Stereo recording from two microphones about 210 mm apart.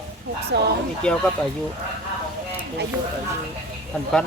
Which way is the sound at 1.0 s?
5° left (ahead or behind).